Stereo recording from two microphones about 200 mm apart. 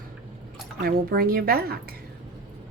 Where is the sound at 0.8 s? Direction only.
50° right (ahead or behind).